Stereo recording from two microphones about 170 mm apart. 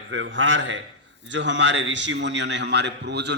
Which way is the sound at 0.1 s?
90° right.